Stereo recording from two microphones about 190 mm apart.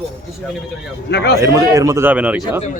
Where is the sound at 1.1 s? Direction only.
60° left (ahead or behind).